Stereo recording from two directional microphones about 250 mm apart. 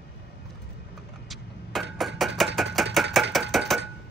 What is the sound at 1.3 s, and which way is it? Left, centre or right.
Vehicle, centre.